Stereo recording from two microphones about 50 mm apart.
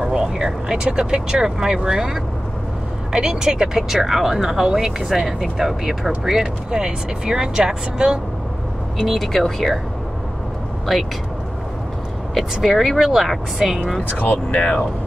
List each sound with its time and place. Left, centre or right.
0.0 s speech: centre
9.0 s speech: centre
12.4 s speech: centre
14.0 s speech: left